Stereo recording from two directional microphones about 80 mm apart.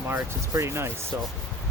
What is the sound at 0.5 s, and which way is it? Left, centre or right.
Speech, right.